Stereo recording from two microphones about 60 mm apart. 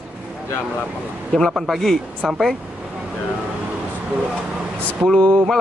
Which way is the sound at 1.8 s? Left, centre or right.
Centre.